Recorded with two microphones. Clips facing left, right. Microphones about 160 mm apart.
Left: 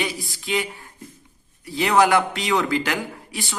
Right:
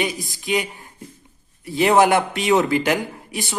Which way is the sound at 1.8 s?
25° right (ahead or behind).